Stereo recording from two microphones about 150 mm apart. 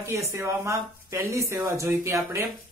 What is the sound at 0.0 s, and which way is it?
A man's voice, 20° right (ahead or behind).